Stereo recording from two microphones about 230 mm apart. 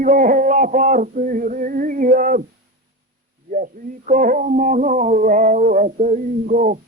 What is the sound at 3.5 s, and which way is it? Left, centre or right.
Speech, right.